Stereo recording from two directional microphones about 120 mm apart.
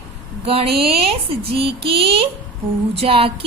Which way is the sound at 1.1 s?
50° right (ahead or behind).